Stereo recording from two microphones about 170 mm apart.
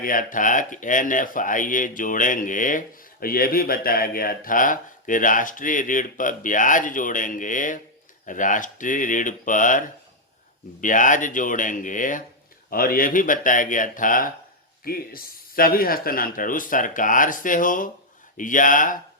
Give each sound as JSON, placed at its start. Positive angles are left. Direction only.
{"t": 0.0, "sound": "speech", "side_deg": 55}